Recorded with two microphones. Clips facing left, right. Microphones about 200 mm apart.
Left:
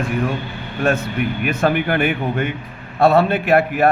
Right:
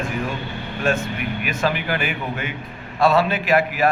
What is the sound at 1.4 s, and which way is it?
A man's voice, 55° left (ahead or behind).